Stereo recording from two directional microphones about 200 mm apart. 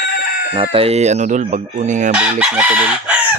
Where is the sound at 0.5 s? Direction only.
25° right (ahead or behind).